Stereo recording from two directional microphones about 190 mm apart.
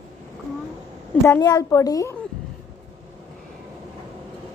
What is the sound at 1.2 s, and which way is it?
Speech, 15° left (ahead or behind).